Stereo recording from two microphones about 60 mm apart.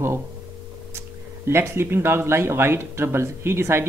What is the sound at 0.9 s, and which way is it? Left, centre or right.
Speech, right.